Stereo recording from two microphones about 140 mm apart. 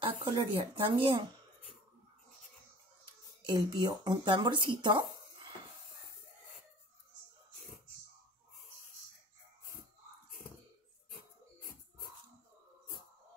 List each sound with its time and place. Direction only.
0.0 s speech: 35° right (ahead or behind)
3.4 s speech: 30° right (ahead or behind)